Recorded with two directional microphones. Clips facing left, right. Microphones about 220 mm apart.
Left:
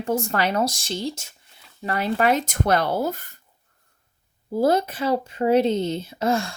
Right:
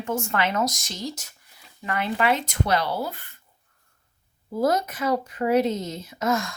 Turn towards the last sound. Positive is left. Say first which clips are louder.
# left 2 dB
turn(degrees=30)  # may be behind; listen again after turning